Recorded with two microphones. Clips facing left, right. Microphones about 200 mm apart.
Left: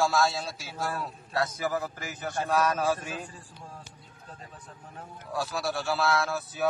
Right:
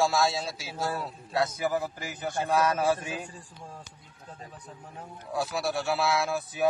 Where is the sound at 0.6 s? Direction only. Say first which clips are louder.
Right 1 dB; 5° right (ahead or behind).